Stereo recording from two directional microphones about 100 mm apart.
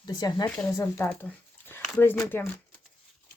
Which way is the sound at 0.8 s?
25° left (ahead or behind).